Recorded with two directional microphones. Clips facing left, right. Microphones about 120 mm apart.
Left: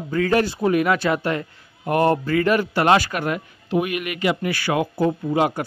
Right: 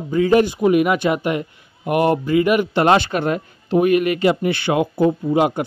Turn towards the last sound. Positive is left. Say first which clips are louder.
# right 3 dB
turn(degrees=-20)  # may be behind; listen again after turning